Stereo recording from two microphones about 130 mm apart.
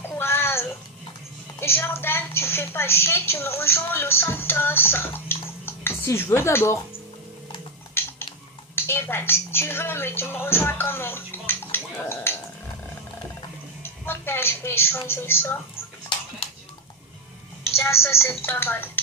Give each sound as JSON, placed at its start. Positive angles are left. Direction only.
{"t": 0.1, "sound": "a sound", "side_deg": 15}
{"t": 1.6, "sound": "a woman's voice", "side_deg": 20}
{"t": 8.0, "sound": "typing", "side_deg": 20}
{"t": 8.7, "sound": "a woman's voice", "side_deg": 15}
{"t": 13.8, "sound": "a woman's voice", "side_deg": 15}
{"t": 17.7, "sound": "speech", "side_deg": 20}